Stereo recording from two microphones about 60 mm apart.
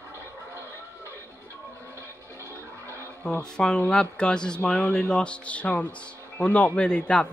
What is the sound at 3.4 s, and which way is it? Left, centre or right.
A man's voice, centre.